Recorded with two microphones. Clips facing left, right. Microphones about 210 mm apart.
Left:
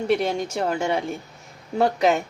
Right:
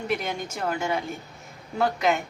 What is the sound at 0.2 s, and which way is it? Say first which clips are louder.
A woman's voice: left 7 dB; 30° left (ahead or behind).